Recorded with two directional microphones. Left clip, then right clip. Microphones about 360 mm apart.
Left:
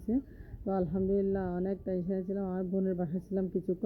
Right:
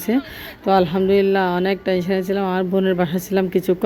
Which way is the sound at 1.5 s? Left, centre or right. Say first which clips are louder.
Right 15 dB; centre.